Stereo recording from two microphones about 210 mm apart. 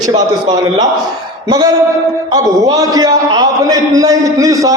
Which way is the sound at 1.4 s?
20° right (ahead or behind).